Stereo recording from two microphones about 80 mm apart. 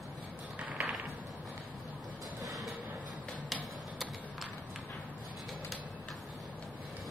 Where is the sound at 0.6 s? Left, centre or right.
Centre.